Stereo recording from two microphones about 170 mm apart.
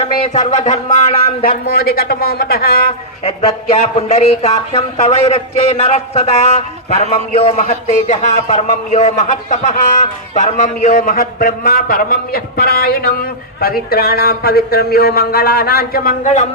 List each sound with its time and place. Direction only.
0.0 s speech: 40° left (ahead or behind)
1.5 s a man's voice: 60° left (ahead or behind)
3.2 s speech: 40° left (ahead or behind)
10.9 s a man's voice: 55° left (ahead or behind)